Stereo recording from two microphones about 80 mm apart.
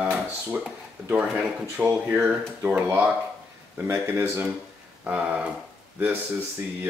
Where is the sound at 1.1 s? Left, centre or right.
Centre.